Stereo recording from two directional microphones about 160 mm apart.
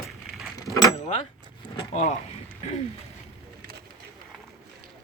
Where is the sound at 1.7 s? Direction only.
45° left (ahead or behind).